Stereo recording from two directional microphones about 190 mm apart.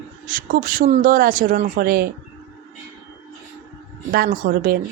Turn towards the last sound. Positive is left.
turn(degrees=-50)  # may be behind; listen again after turning